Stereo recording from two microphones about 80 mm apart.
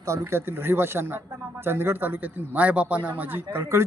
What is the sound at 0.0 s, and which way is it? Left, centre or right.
A man's voice, right.